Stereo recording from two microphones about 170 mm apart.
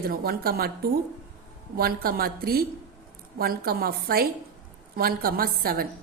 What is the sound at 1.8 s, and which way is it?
A woman's voice, 60° right (ahead or behind).